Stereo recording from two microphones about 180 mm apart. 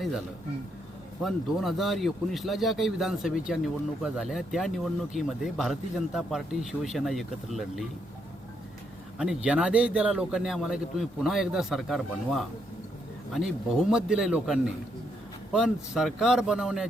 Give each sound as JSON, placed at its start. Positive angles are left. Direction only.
{"t": 1.2, "sound": "a man's voice", "side_deg": 0}
{"t": 9.1, "sound": "a man's voice", "side_deg": -5}